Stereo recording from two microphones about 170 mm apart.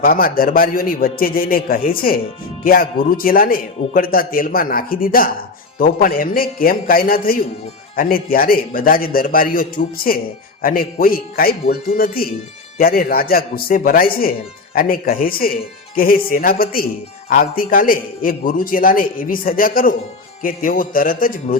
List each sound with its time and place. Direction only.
0.0 s speech: 60° left (ahead or behind)